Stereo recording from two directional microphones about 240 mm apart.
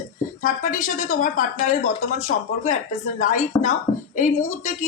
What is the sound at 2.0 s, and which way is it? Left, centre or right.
Speech, left.